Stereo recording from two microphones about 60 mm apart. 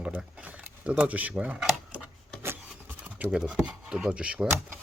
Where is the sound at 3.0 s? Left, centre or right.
Right.